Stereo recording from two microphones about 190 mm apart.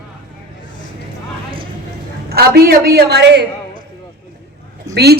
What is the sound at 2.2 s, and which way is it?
Speech, 55° right (ahead or behind).